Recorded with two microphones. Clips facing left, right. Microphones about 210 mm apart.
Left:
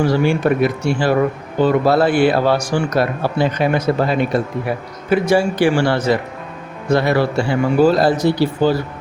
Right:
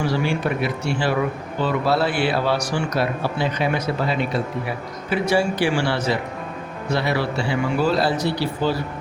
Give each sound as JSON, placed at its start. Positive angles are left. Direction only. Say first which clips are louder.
{"t": 0.1, "sound": "speech", "louder": "left 7 dB", "side_deg": 45}